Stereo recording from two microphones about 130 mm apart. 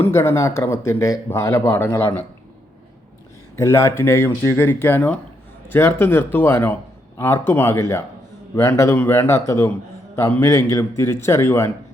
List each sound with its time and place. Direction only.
0.0 s speech: 20° left (ahead or behind)
3.6 s speech: 20° left (ahead or behind)